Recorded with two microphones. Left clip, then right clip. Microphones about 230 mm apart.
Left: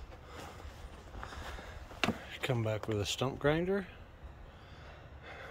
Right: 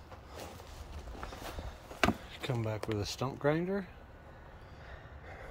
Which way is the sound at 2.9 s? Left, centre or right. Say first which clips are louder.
Left 2 dB; centre.